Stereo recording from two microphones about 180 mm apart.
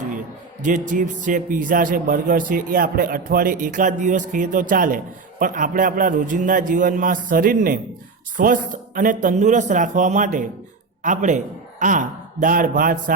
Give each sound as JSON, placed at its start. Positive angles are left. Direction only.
{"t": 0.6, "sound": "speech", "side_deg": -45}